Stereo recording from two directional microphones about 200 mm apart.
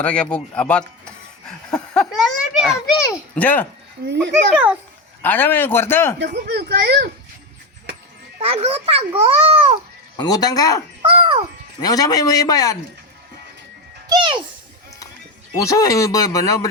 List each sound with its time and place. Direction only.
0.0 s speech: 5° left (ahead or behind)
3.3 s speech: 10° left (ahead or behind)
4.0 s a child's voice: 60° right (ahead or behind)
5.2 s speech: 10° left (ahead or behind)
6.1 s speech: 55° right (ahead or behind)
8.4 s a child's voice: 30° right (ahead or behind)
10.2 s speech: 20° left (ahead or behind)
11.0 s a child's voice: 25° right (ahead or behind)
11.8 s speech: 20° left (ahead or behind)
14.1 s a child's voice: 25° right (ahead or behind)
15.5 s speech: 15° left (ahead or behind)